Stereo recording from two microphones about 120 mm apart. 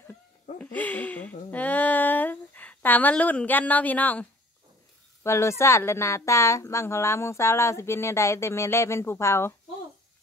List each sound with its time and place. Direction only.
0.6 s a woman's voice: 15° left (ahead or behind)